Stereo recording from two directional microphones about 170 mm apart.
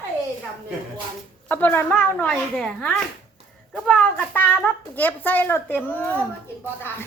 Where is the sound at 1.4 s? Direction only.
10° left (ahead or behind).